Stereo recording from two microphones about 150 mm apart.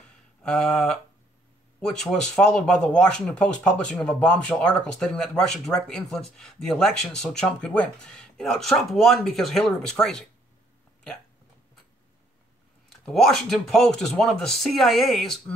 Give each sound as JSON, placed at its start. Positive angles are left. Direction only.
{"t": 0.4, "sound": "a sound", "side_deg": 5}
{"t": 1.8, "sound": "speech", "side_deg": 5}
{"t": 12.9, "sound": "speech", "side_deg": 0}